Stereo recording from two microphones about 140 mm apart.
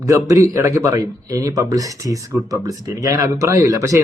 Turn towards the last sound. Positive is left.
turn(degrees=-25)  # may be behind; listen again after turning